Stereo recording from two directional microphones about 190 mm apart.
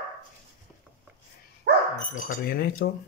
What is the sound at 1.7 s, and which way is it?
Dog, 60° right (ahead or behind).